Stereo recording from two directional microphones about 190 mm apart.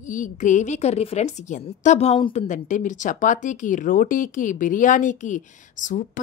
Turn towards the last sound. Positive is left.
turn(degrees=40)  # may be behind; listen again after turning